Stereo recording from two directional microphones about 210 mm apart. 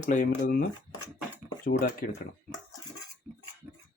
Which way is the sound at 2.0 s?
45° left (ahead or behind).